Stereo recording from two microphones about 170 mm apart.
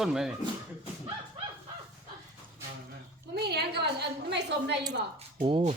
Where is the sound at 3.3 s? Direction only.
75° right (ahead or behind).